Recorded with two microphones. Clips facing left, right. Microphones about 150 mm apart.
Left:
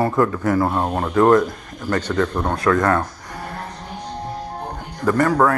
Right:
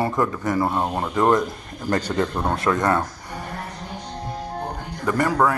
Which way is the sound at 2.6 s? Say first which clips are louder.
Left 5 dB; 20° right (ahead or behind).